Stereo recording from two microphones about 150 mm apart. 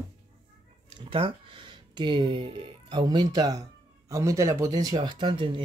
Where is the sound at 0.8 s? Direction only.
35° right (ahead or behind).